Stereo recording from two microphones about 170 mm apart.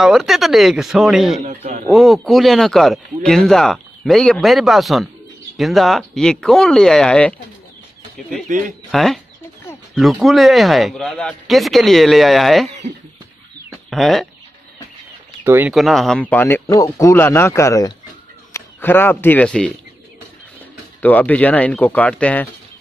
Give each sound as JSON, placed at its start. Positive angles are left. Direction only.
{"t": 0.0, "sound": "speech", "side_deg": 0}
{"t": 1.4, "sound": "speech", "side_deg": -40}
{"t": 1.9, "sound": "speech", "side_deg": 0}
{"t": 8.5, "sound": "speech", "side_deg": -50}
{"t": 8.9, "sound": "speech", "side_deg": 0}
{"t": 10.2, "sound": "speech", "side_deg": 0}
{"t": 13.8, "sound": "speech", "side_deg": 0}
{"t": 15.4, "sound": "speech", "side_deg": -15}
{"t": 15.7, "sound": "a man's voice", "side_deg": 0}
{"t": 21.0, "sound": "speech", "side_deg": 10}